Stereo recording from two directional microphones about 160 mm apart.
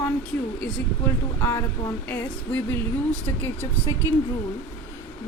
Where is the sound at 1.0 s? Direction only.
15° left (ahead or behind).